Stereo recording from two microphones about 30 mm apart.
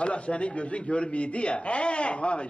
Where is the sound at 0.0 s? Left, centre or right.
Left.